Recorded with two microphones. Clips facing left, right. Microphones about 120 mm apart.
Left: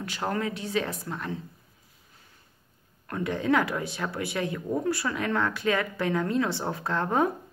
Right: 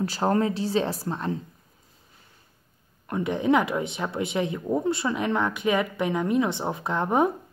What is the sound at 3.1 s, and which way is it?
Speech, 20° right (ahead or behind).